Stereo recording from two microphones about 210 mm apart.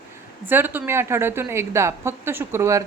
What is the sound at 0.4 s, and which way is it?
A woman's voice, 10° right (ahead or behind).